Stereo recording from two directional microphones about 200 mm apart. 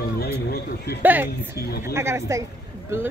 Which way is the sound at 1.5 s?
50° left (ahead or behind).